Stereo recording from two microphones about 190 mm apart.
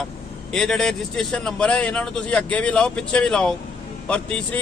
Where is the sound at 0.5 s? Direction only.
5° left (ahead or behind).